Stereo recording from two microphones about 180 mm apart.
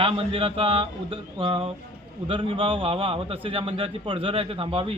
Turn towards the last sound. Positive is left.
turn(degrees=-30)  # may be behind; listen again after turning